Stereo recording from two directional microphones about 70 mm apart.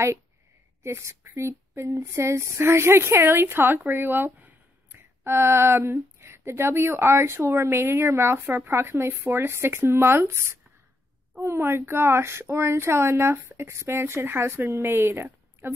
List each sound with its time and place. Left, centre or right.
0.8 s speech: right
5.2 s speech: right
11.4 s speech: right